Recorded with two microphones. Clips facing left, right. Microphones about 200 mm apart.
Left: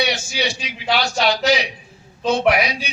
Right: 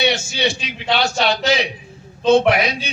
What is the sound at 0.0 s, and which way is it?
A man's voice, 25° right (ahead or behind).